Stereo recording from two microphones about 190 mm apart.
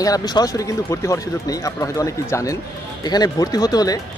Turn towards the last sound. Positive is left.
turn(degrees=20)  # may be behind; listen again after turning